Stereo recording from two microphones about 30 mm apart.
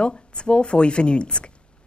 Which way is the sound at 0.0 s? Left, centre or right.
Left.